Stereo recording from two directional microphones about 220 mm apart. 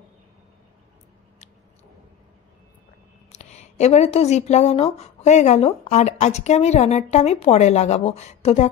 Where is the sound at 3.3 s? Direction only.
30° left (ahead or behind).